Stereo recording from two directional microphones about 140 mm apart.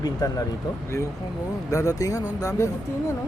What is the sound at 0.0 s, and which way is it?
Speech, 25° left (ahead or behind).